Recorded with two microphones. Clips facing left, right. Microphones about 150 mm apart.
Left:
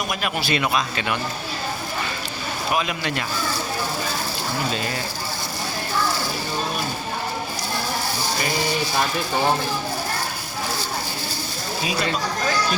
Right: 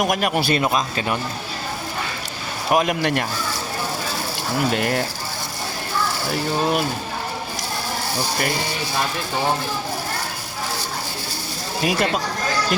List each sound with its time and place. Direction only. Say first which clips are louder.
0.1 s a man's voice: right 5 dB; 50° right (ahead or behind)
2.7 s speech: right 7 dB; 55° right (ahead or behind)
4.7 s speech: right 6 dB; 65° right (ahead or behind)
6.3 s mechanisms: right 6 dB; 70° right (ahead or behind)